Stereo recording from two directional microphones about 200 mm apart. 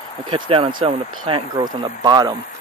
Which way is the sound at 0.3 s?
25° right (ahead or behind).